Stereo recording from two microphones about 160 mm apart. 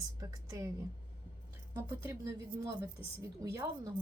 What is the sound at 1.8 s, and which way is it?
A woman's voice, 20° right (ahead or behind).